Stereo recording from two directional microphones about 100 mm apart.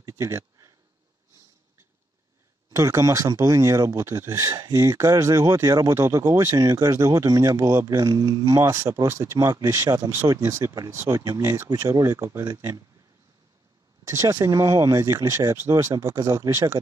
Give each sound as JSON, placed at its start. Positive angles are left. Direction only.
{"t": 0.0, "sound": "a sound", "side_deg": -30}
{"t": 2.7, "sound": "speech", "side_deg": -30}
{"t": 9.5, "sound": "speech", "side_deg": -35}
{"t": 14.0, "sound": "speech", "side_deg": -35}